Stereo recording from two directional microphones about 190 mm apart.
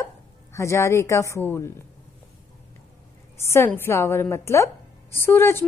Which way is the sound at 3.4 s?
15° left (ahead or behind).